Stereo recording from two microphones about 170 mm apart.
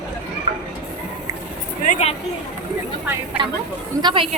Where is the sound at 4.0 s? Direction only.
25° right (ahead or behind).